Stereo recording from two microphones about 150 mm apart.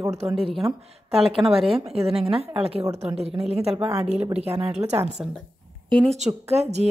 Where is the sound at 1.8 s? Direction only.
40° right (ahead or behind).